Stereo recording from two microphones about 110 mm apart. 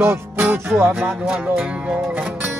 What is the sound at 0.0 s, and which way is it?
Music, 20° right (ahead or behind).